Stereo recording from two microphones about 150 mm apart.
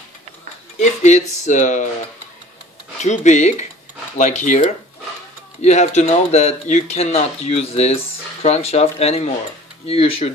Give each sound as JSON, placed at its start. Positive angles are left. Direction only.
{"t": 0.7, "sound": "speech", "side_deg": 50}
{"t": 3.0, "sound": "speech", "side_deg": 50}